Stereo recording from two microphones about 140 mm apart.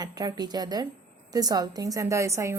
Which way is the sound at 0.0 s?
25° right (ahead or behind).